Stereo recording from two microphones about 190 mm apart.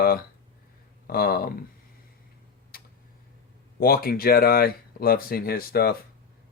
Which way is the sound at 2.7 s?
50° left (ahead or behind).